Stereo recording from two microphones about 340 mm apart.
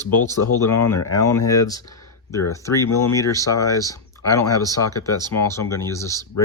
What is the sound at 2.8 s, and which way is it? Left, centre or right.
Speech, left.